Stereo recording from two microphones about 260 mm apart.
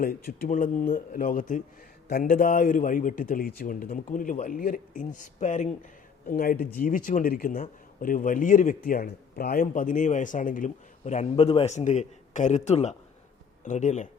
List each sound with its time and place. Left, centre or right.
0.0 s a man's voice: left